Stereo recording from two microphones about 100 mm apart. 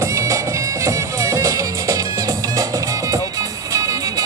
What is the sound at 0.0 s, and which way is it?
Music, 30° right (ahead or behind).